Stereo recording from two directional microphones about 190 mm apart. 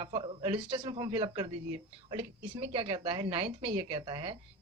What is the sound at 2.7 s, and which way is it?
A man's voice, 30° right (ahead or behind).